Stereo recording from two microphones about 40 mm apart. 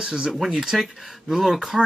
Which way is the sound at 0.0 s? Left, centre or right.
Right.